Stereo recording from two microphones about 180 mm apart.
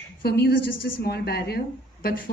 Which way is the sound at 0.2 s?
60° left (ahead or behind).